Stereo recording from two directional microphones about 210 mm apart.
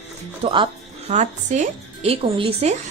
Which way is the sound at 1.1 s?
35° right (ahead or behind).